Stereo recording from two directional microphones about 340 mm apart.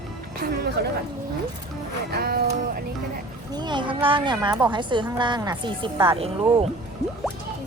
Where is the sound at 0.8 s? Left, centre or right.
Right.